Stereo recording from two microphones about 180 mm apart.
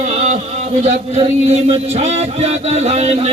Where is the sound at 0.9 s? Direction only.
35° right (ahead or behind).